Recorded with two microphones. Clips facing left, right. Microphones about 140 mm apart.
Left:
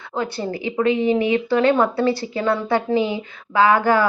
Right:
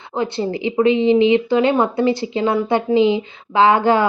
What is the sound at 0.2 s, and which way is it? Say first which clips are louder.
Speech: right 4 dB; 20° right (ahead or behind).